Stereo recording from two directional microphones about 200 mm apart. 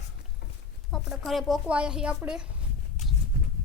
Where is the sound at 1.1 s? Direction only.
Centre (ahead or behind).